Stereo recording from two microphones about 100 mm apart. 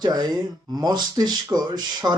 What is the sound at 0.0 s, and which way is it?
Speech, 40° right (ahead or behind).